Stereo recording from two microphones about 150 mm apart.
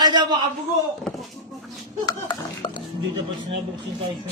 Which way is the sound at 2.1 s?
30° left (ahead or behind).